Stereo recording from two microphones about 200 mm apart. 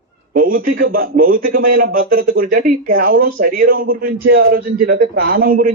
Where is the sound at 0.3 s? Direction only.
45° right (ahead or behind).